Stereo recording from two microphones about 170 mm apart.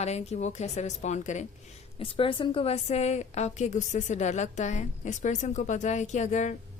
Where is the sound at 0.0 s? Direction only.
40° left (ahead or behind).